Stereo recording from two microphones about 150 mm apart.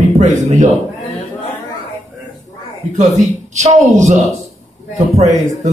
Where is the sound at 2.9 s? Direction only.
55° right (ahead or behind).